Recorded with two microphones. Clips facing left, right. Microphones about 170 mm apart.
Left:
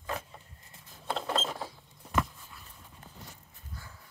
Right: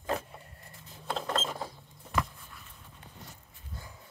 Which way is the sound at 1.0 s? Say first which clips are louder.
Even; 5° left (ahead or behind).